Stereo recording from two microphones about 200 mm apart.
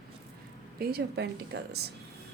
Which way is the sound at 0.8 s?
50° right (ahead or behind).